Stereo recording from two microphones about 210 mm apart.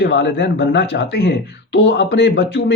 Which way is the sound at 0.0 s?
55° left (ahead or behind).